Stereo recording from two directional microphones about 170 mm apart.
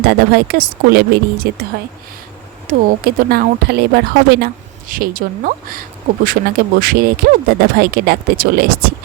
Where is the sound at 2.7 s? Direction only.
60° right (ahead or behind).